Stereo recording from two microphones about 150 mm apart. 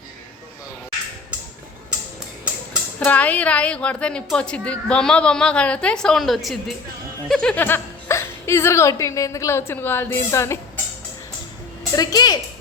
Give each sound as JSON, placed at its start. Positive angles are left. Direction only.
{"t": 3.0, "sound": "a woman's voice", "side_deg": 10}
{"t": 11.9, "sound": "a woman's voice", "side_deg": 25}